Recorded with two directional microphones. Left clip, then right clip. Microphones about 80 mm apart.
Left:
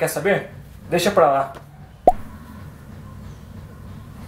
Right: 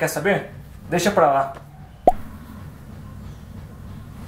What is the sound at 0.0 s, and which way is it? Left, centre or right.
Speech, left.